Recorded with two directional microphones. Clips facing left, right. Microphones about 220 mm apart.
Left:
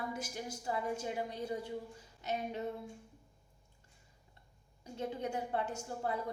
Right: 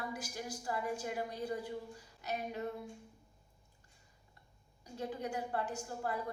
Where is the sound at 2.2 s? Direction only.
25° left (ahead or behind).